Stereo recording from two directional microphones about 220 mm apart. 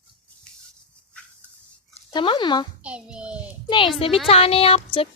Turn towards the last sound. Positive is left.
turn(degrees=25)  # may be behind; listen again after turning